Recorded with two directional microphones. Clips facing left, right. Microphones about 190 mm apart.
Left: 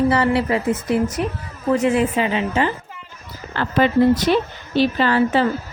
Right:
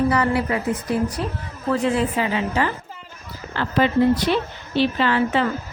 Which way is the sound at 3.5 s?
55° left (ahead or behind).